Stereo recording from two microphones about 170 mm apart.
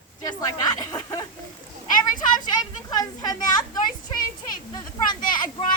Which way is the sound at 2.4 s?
25° left (ahead or behind).